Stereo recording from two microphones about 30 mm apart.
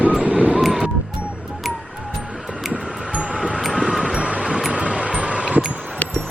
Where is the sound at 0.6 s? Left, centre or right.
Centre.